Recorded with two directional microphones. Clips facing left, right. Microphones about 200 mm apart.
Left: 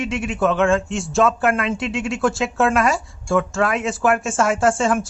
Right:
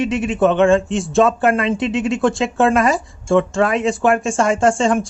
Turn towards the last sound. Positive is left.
turn(degrees=5)  # may be behind; listen again after turning